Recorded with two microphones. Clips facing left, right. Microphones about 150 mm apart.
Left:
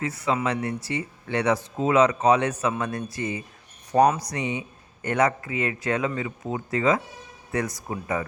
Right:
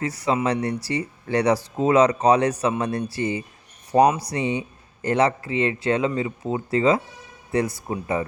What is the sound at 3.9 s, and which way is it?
Speech, 15° right (ahead or behind).